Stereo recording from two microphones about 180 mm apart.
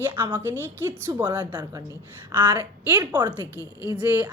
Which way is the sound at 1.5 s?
20° right (ahead or behind).